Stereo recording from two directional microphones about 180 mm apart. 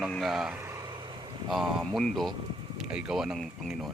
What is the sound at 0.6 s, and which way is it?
Vehicle, 15° right (ahead or behind).